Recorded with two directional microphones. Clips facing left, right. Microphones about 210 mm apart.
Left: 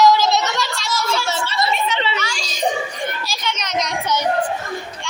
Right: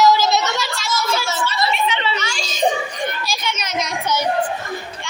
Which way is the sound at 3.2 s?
10° right (ahead or behind).